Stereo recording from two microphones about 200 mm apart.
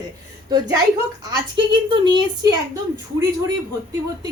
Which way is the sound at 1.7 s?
25° right (ahead or behind).